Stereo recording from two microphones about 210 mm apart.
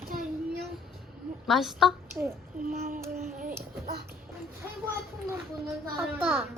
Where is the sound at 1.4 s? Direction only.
Centre (ahead or behind).